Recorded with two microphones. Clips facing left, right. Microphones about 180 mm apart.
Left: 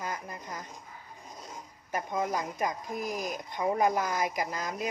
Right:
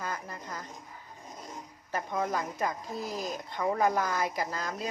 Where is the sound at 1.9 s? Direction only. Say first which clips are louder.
Even; 15° left (ahead or behind).